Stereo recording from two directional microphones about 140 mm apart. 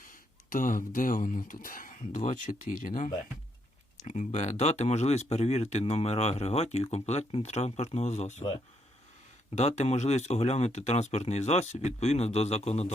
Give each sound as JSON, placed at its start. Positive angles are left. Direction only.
{"t": 0.1, "sound": "speech", "side_deg": 75}
{"t": 3.9, "sound": "speech", "side_deg": 60}
{"t": 9.6, "sound": "speech", "side_deg": 55}